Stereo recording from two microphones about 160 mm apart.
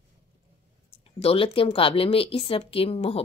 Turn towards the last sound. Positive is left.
turn(degrees=40)  # may be behind; listen again after turning